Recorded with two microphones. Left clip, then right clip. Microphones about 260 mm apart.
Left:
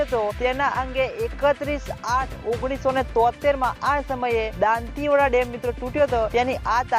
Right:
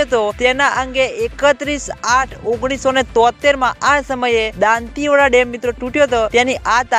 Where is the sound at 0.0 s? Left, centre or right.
Right.